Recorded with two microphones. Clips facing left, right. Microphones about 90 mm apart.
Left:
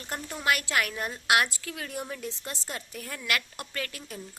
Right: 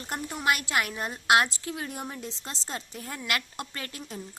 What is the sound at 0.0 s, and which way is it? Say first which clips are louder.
A woman's voice: right 2 dB; 20° right (ahead or behind).